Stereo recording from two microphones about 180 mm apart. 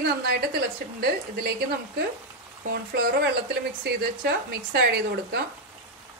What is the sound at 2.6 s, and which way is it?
A woman's voice, 65° right (ahead or behind).